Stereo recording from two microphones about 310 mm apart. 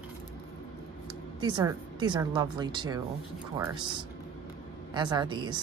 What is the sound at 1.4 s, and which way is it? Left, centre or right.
Speech, centre.